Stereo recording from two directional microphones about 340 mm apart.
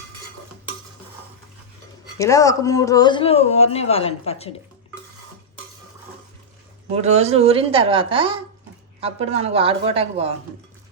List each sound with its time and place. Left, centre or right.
2.1 s speech: centre
6.9 s a woman's voice: centre